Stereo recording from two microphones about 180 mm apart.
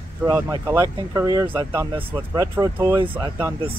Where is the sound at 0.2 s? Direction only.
15° right (ahead or behind).